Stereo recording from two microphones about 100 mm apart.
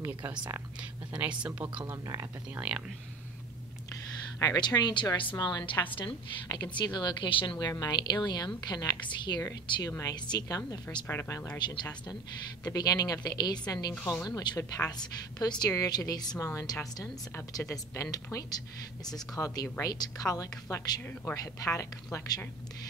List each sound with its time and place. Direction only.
0.7 s a woman's voice: 15° right (ahead or behind)
4.4 s a woman's voice: 40° left (ahead or behind)
9.0 s speech: 50° left (ahead or behind)
9.4 s a woman's voice: 35° left (ahead or behind)
11.1 s a woman's voice: 25° left (ahead or behind)
11.6 s a woman's voice: 50° left (ahead or behind)
14.6 s a woman's voice: 25° left (ahead or behind)
14.9 s speech: 45° left (ahead or behind)
16.7 s a woman's voice: 25° left (ahead or behind)